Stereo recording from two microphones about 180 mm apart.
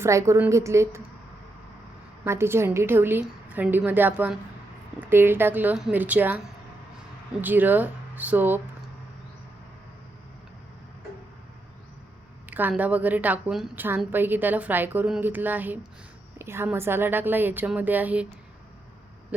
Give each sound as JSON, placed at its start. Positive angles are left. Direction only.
{"t": 0.0, "sound": "a woman's voice", "side_deg": -15}
{"t": 2.2, "sound": "a woman's voice", "side_deg": -15}
{"t": 7.4, "sound": "a woman's voice", "side_deg": -10}
{"t": 12.5, "sound": "a woman's voice", "side_deg": -10}